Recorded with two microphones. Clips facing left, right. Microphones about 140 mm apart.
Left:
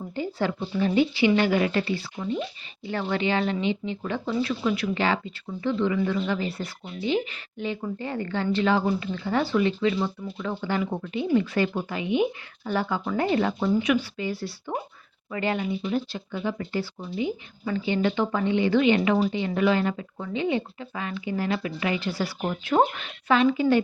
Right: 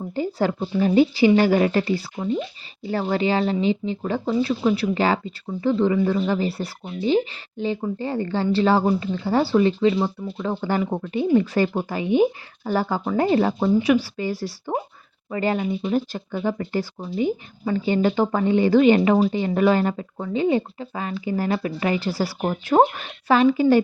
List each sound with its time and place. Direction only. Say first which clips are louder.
0.1 s speech: right 5 dB; 40° right (ahead or behind)